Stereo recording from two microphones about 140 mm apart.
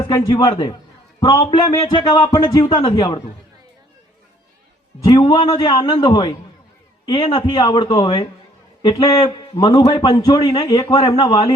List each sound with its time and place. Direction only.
0.0 s speech: 30° left (ahead or behind)
4.9 s a man's voice: 30° left (ahead or behind)